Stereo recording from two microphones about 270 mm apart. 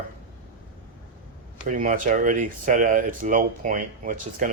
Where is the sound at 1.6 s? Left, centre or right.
Right.